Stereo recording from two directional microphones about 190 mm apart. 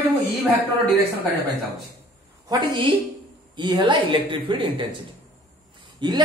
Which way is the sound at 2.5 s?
25° right (ahead or behind).